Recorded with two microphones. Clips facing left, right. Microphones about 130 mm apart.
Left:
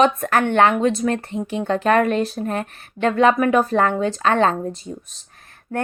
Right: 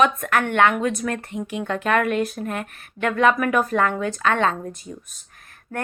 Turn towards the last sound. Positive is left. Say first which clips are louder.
# left 4 dB
turn(degrees=35)  # may be behind; listen again after turning